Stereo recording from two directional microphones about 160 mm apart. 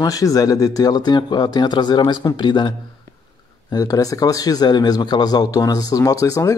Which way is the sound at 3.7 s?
20° left (ahead or behind).